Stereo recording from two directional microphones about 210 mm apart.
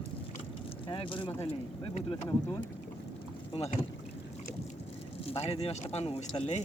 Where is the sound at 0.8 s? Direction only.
25° left (ahead or behind).